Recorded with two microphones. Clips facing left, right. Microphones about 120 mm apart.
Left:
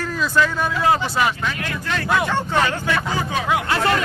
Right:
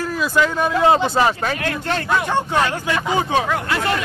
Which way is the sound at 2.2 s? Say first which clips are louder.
Right 1 dB; 15° right (ahead or behind).